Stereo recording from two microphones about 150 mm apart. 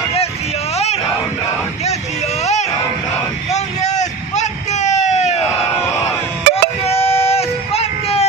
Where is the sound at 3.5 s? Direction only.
50° left (ahead or behind).